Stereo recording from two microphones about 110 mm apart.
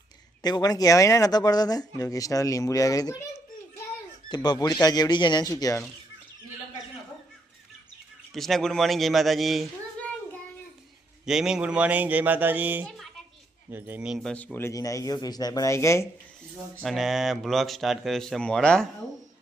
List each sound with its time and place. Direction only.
0.4 s speech: 35° left (ahead or behind)
4.4 s speech: 35° left (ahead or behind)
8.3 s speech: 5° left (ahead or behind)
11.3 s speech: 5° right (ahead or behind)
12.9 s a sound: centre (ahead or behind)
13.7 s speech: 20° right (ahead or behind)
14.1 s speech: centre (ahead or behind)
14.3 s speech: 15° left (ahead or behind)
14.7 s speech: 30° left (ahead or behind)
16.8 s speech: centre (ahead or behind)